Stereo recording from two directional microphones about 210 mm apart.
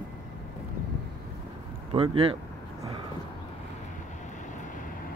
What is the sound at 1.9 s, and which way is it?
Speech, 30° right (ahead or behind).